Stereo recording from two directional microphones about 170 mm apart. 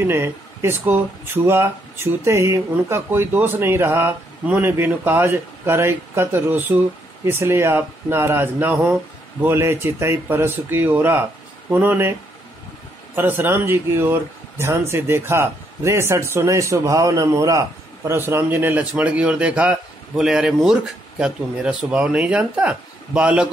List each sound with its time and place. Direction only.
0.0 s speech: 15° right (ahead or behind)